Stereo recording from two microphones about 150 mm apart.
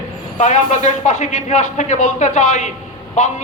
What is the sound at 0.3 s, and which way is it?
A man's voice, 55° left (ahead or behind).